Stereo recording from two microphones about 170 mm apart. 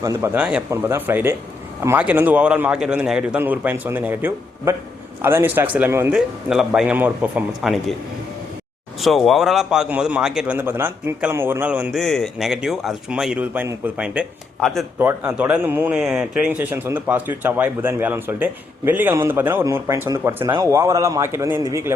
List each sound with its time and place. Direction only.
0.0 s speech: 20° right (ahead or behind)
0.3 s a man's voice: 5° right (ahead or behind)
9.0 s a man's voice: centre (ahead or behind)
14.6 s a man's voice: centre (ahead or behind)
14.9 s speech: 15° right (ahead or behind)
20.4 s speech: 30° right (ahead or behind)
20.7 s speech: 20° right (ahead or behind)